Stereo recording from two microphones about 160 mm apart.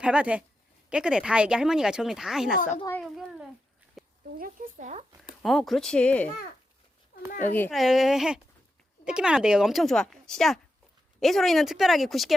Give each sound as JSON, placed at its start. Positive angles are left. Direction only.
{"t": 0.0, "sound": "speech", "side_deg": -5}
{"t": 3.0, "sound": "a sound", "side_deg": 0}
{"t": 4.4, "sound": "speech", "side_deg": -60}
{"t": 5.4, "sound": "speech", "side_deg": 0}
{"t": 7.3, "sound": "a woman's voice", "side_deg": 55}
{"t": 7.7, "sound": "speech", "side_deg": 0}